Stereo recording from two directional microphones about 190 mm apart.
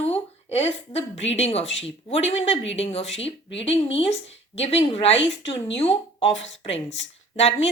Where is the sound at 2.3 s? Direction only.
75° left (ahead or behind).